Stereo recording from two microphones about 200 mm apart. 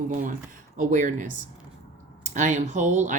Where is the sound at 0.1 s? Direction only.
40° right (ahead or behind).